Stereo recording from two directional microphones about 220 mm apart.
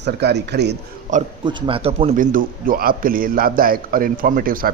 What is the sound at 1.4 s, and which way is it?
A man's voice, 20° right (ahead or behind).